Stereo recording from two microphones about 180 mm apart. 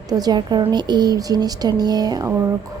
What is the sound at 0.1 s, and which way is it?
A woman's voice, 20° right (ahead or behind).